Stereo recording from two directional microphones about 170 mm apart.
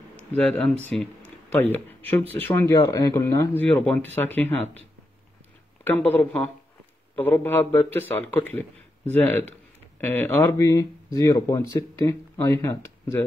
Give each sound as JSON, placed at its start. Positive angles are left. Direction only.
{"t": 0.4, "sound": "speech", "side_deg": 5}
{"t": 5.9, "sound": "speech", "side_deg": 10}